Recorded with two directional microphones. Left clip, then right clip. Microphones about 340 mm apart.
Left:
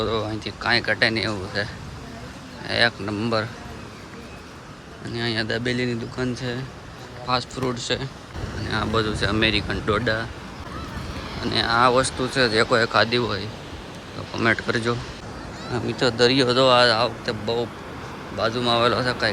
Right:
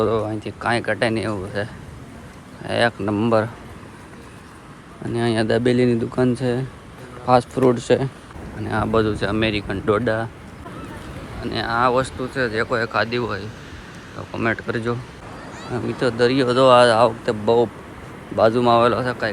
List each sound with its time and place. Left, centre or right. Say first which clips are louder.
0.0 s speech: right 4 dB; centre
5.1 s speech: right 5 dB; centre
11.4 s speech: left 1 dB; centre